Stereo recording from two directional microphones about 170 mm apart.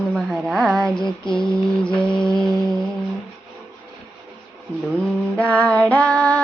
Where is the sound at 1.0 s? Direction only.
25° left (ahead or behind).